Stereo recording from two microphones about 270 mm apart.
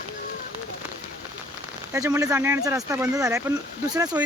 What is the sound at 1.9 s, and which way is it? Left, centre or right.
Speech, centre.